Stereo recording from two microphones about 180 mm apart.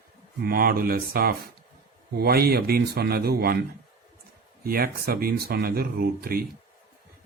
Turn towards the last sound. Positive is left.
turn(degrees=-55)  # may be behind; listen again after turning